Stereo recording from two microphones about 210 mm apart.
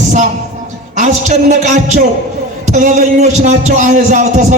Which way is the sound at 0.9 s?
35° right (ahead or behind).